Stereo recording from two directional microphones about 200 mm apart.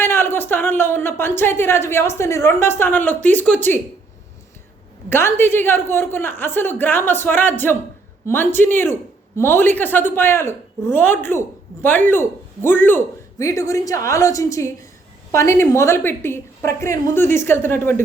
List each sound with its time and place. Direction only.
0.0 s a woman's voice: 10° left (ahead or behind)
5.0 s a woman's voice: 10° left (ahead or behind)